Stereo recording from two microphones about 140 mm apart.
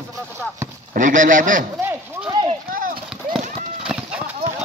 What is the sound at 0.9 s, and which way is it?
Speech, 70° right (ahead or behind).